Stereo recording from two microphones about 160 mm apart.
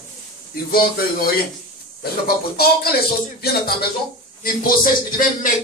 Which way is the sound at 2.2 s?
75° left (ahead or behind).